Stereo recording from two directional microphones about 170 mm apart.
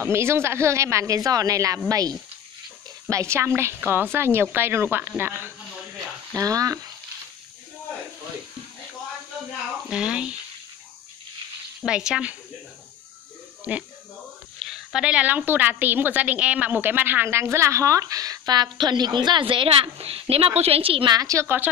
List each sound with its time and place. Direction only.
0.0 s a woman's voice: 15° right (ahead or behind)
9.8 s speech: 5° right (ahead or behind)
11.8 s speech: 5° right (ahead or behind)
13.7 s a woman's voice: 10° right (ahead or behind)